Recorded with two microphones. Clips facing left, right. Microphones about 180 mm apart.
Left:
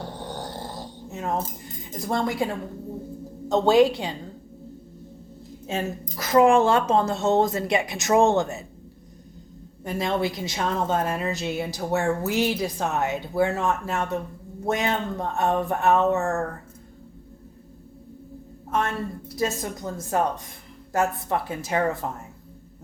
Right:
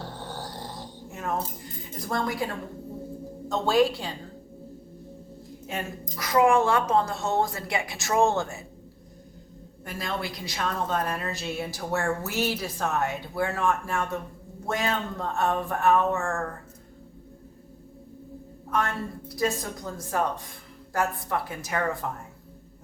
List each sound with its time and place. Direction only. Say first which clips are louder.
0.0 s snoring: left 3 dB; 15° left (ahead or behind)
2.0 s a woman's voice: left 4 dB; 25° left (ahead or behind)
3.5 s a woman's voice: left 5 dB; 20° left (ahead or behind)
5.6 s a woman's voice: left 5 dB; 25° left (ahead or behind)
9.8 s a woman's voice: left 7 dB; 20° left (ahead or behind)
18.7 s a woman's voice: left 2 dB; 25° left (ahead or behind)